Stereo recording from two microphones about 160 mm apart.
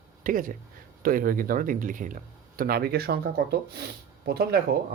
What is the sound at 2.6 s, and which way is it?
Speech, 70° right (ahead or behind).